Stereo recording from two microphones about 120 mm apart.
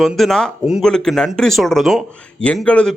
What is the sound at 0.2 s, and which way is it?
Speech, 5° left (ahead or behind).